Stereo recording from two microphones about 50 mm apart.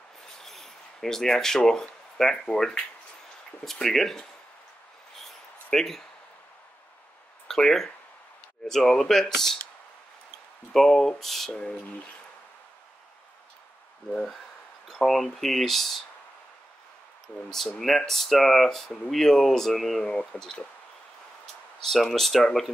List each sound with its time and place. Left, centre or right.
0.2 s a sound: centre
2.4 s speech: centre
3.8 s speech: centre
5.7 s speech: centre
7.4 s speech: centre
10.7 s speech: centre
14.1 s speech: centre
17.7 s speech: centre
20.0 s speech: centre
21.8 s speech: centre